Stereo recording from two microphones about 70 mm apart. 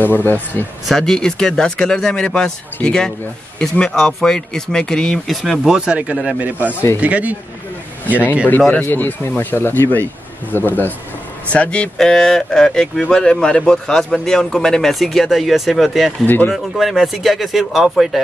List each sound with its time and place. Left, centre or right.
0.0 s speech: left
0.8 s a man's voice: centre; by 7.3 s right
8.5 s speech: left
11.5 s a man's voice: centre
16.3 s speech: left
16.5 s speech: centre